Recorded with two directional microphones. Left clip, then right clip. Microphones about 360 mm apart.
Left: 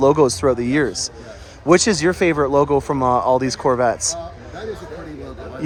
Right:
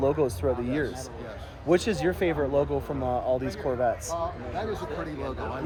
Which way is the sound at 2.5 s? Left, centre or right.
Left.